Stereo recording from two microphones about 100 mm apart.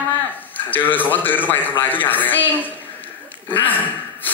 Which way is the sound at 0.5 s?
20° left (ahead or behind).